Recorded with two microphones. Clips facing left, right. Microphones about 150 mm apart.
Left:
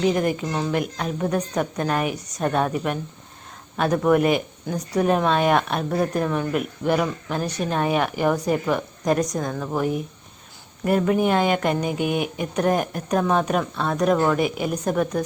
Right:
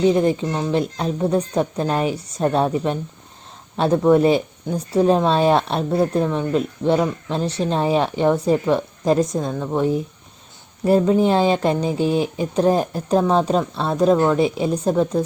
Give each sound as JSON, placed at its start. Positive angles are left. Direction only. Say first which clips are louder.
{"t": 0.0, "sound": "a woman's voice", "louder": "right 4 dB", "side_deg": -30}
{"t": 9.5, "sound": "a woman's voice", "louder": "right 3 dB", "side_deg": -15}
{"t": 9.7, "sound": "a woman's voice", "louder": "right 5 dB", "side_deg": -30}